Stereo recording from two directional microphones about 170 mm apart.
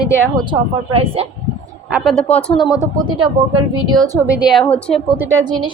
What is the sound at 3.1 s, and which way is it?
A woman's voice, 30° right (ahead or behind).